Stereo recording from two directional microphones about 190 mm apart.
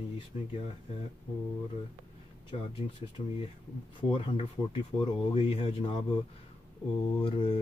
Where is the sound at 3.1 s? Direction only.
25° left (ahead or behind).